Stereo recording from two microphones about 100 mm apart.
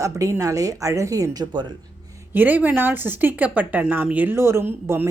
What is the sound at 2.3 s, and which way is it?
A woman's voice, 20° right (ahead or behind).